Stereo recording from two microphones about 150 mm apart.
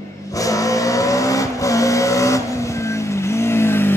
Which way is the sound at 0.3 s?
20° left (ahead or behind).